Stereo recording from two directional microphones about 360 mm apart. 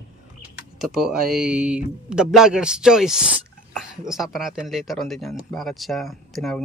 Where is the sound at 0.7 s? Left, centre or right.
Centre.